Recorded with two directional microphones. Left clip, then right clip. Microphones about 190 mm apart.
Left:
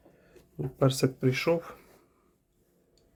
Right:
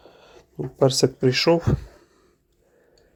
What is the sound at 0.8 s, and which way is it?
Speech, 10° right (ahead or behind).